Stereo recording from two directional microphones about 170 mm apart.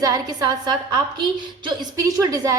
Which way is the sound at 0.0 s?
20° right (ahead or behind).